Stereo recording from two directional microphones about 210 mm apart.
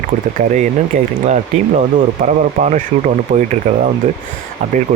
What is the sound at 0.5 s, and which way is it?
Speech, 35° right (ahead or behind).